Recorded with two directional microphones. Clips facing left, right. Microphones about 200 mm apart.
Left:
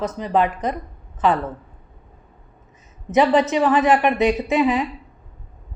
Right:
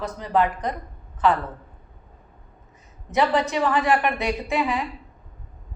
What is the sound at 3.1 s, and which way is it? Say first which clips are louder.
A woman's voice: left 5 dB; 20° left (ahead or behind).